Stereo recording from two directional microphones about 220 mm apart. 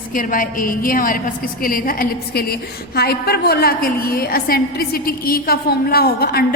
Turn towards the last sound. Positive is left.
turn(degrees=45)  # may be behind; listen again after turning